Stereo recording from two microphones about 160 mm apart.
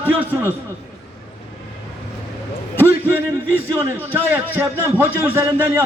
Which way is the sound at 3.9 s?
10° right (ahead or behind).